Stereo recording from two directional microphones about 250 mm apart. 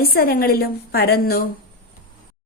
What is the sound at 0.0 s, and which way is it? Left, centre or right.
Speech, left.